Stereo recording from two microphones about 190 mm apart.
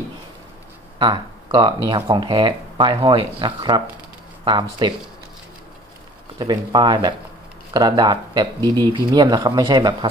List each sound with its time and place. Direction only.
0.9 s speech: 25° right (ahead or behind)
6.3 s speech: 20° right (ahead or behind)